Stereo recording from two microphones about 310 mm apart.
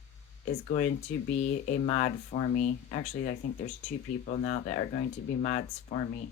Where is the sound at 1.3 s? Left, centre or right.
Left.